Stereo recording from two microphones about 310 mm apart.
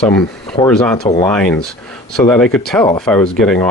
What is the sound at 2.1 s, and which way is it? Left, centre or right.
Speech, centre.